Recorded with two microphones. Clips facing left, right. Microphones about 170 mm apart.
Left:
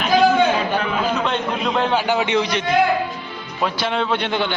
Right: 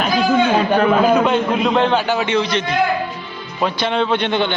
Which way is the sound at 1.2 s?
5° right (ahead or behind).